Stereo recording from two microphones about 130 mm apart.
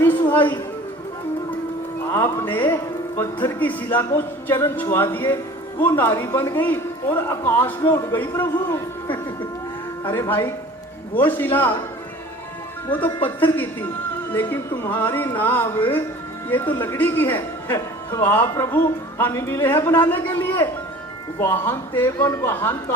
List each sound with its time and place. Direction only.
0.0 s a sound: 15° left (ahead or behind)
2.1 s a man's voice: 20° left (ahead or behind)
10.0 s speech: 20° left (ahead or behind)
12.9 s speech: 15° left (ahead or behind)